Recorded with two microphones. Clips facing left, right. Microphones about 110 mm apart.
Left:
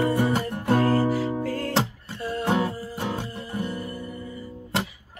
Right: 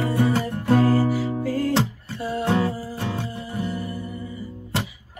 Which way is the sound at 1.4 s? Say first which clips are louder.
Right 3 dB; 5° right (ahead or behind).